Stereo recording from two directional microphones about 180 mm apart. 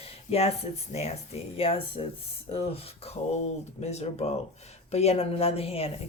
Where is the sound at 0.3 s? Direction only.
35° left (ahead or behind).